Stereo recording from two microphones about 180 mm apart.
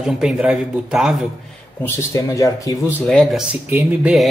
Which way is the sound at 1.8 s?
15° left (ahead or behind).